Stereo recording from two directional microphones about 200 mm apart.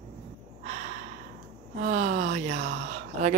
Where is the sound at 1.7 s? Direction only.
35° right (ahead or behind).